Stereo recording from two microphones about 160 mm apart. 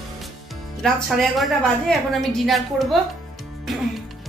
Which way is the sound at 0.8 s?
Centre (ahead or behind).